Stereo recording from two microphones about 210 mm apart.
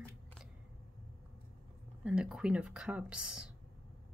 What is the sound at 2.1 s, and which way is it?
Speech, 5° right (ahead or behind).